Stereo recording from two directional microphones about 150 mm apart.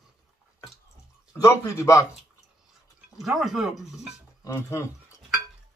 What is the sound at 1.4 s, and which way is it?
Speech, 20° left (ahead or behind).